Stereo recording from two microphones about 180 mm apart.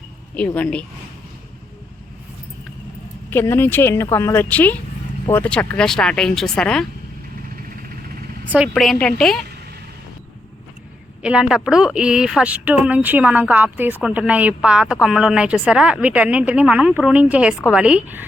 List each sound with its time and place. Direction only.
0.3 s speech: 10° left (ahead or behind)
3.2 s speech: 10° left (ahead or behind)
7.5 s vehicle: 55° right (ahead or behind)
8.4 s speech: 5° right (ahead or behind)
11.2 s speech: 5° right (ahead or behind)